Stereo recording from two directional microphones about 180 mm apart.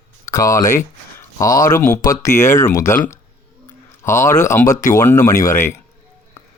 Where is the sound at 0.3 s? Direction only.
15° left (ahead or behind).